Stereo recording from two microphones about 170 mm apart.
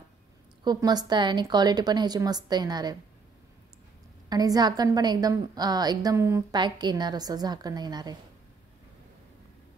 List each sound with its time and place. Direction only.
0.7 s a woman's voice: 25° right (ahead or behind)
4.3 s a woman's voice: 20° right (ahead or behind)